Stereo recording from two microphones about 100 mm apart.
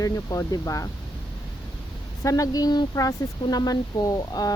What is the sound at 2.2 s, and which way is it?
Speech, 35° left (ahead or behind).